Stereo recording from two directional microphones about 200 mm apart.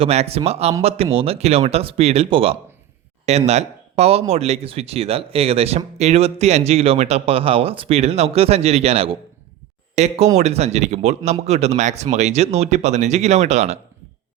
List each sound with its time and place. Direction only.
0.0 s speech: 30° right (ahead or behind)